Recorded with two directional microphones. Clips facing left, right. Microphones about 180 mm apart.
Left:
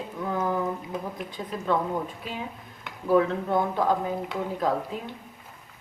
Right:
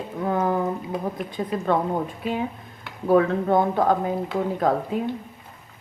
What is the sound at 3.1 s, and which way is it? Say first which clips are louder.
Speech: right 4 dB; 55° right (ahead or behind).